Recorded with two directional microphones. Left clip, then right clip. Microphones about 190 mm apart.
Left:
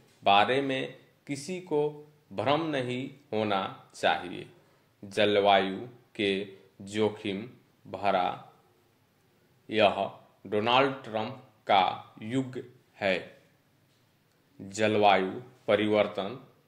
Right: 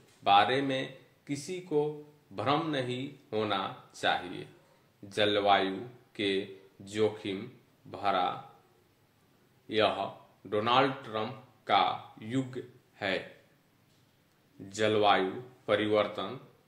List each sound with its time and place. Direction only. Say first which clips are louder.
0.2 s speech: left 1 dB; 35° left (ahead or behind)
9.7 s speech: left 4 dB; 35° left (ahead or behind)
14.7 s speech: left 3 dB; 35° left (ahead or behind)